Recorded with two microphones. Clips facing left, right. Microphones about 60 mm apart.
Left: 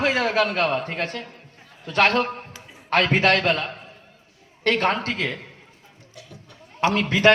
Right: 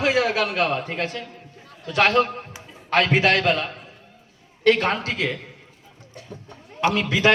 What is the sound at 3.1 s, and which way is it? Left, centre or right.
Speech, centre.